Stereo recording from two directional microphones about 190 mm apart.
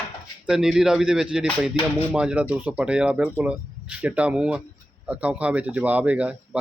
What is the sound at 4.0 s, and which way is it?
Speech, 5° right (ahead or behind).